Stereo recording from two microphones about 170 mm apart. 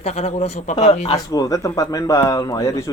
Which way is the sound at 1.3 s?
20° left (ahead or behind).